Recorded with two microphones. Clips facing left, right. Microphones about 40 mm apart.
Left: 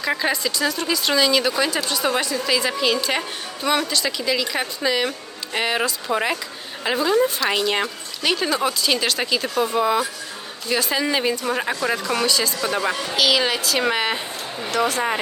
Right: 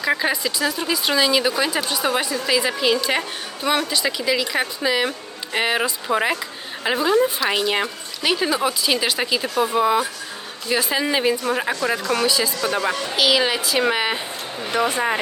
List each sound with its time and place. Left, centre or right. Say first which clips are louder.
0.0 s a woman's voice: right 1 dB; centre
14.7 s speech: even; centre